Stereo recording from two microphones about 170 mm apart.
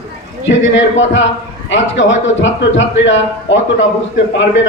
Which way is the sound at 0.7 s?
90° left.